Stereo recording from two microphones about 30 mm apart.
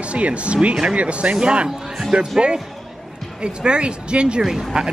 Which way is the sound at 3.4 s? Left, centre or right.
Right.